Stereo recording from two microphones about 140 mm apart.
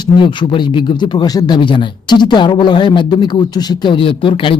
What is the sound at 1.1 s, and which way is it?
Speech, 30° left (ahead or behind).